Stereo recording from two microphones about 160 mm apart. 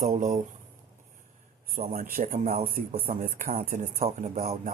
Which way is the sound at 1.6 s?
60° right (ahead or behind).